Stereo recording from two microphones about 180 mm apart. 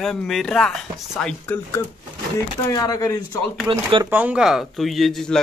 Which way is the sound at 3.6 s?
20° right (ahead or behind).